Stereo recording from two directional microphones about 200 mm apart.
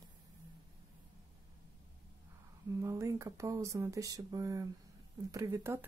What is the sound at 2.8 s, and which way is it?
Speech, 15° right (ahead or behind).